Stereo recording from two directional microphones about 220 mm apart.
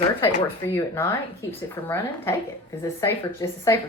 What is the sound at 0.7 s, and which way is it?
A woman's voice, 10° left (ahead or behind).